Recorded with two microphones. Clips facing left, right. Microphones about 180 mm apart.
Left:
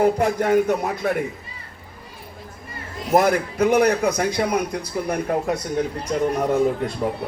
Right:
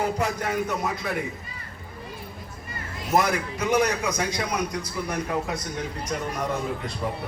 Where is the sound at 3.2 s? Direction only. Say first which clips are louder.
Left 6 dB; 55° left (ahead or behind).